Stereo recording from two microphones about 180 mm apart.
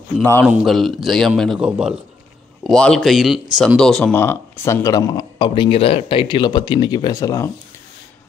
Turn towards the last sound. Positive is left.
turn(degrees=20)  # may be behind; listen again after turning